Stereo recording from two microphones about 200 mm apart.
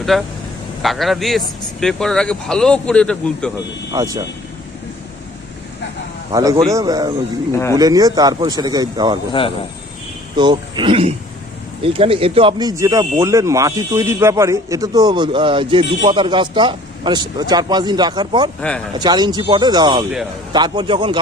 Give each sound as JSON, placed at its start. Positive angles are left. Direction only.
{"t": 0.0, "sound": "a man's voice", "side_deg": 0}
{"t": 3.9, "sound": "a man's voice", "side_deg": -15}
{"t": 6.3, "sound": "a man's voice", "side_deg": -15}
{"t": 10.3, "sound": "speech", "side_deg": -20}